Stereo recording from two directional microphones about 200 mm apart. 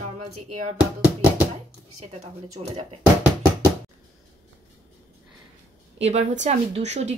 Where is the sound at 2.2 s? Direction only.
35° right (ahead or behind).